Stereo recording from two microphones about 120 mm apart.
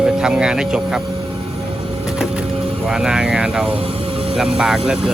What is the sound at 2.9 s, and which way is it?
Speech, 5° right (ahead or behind).